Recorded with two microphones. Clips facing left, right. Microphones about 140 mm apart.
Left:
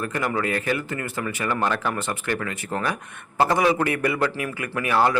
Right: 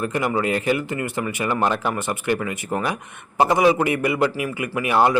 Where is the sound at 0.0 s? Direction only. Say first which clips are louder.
Right 3 dB; 15° right (ahead or behind).